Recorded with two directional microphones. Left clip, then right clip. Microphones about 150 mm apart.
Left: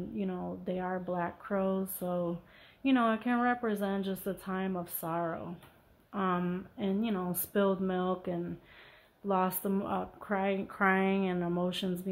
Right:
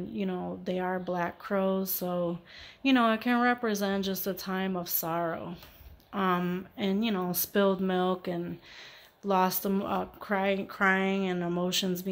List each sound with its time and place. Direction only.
0.1 s a woman's voice: 20° right (ahead or behind)